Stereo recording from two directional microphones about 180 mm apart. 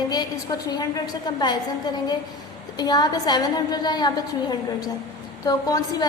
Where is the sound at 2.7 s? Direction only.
20° left (ahead or behind).